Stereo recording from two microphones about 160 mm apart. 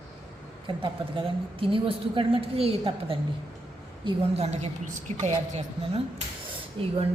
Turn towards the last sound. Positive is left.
turn(degrees=-30)  # may be behind; listen again after turning